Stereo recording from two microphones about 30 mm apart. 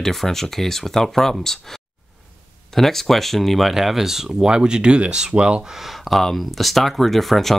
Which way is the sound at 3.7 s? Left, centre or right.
Centre.